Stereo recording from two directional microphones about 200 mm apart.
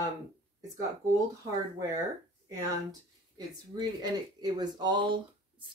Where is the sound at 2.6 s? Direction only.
20° right (ahead or behind).